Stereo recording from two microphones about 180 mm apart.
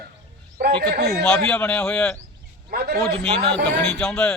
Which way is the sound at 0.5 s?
55° right (ahead or behind).